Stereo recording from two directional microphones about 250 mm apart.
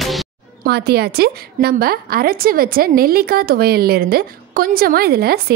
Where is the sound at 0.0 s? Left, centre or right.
Centre.